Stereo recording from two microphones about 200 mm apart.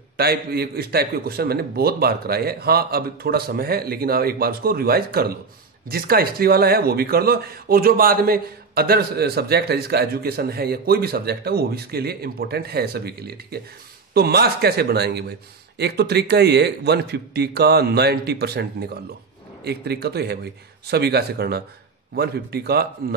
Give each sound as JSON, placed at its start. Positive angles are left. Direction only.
{"t": 0.2, "sound": "speech", "side_deg": -50}